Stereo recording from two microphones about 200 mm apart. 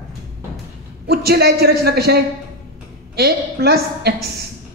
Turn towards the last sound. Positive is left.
turn(degrees=-55)  # may be behind; listen again after turning